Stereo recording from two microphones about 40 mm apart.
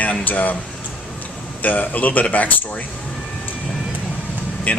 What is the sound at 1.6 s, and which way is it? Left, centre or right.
Speech, left.